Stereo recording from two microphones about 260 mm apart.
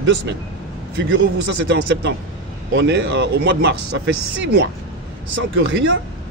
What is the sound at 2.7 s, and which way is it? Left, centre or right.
A man's voice, right.